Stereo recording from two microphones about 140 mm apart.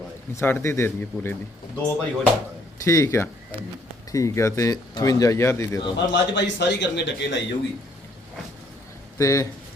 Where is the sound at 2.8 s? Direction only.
20° left (ahead or behind).